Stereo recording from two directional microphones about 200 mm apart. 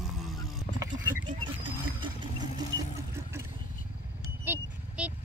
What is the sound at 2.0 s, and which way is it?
Vehicle, 20° right (ahead or behind).